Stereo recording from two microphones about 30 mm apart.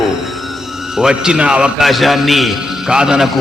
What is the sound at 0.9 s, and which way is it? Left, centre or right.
Speech, right.